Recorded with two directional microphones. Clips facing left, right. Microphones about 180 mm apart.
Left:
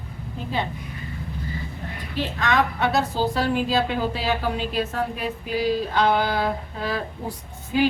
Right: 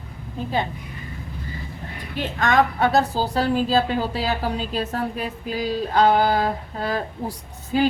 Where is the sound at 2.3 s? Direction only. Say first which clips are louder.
Right 4 dB; 45° right (ahead or behind).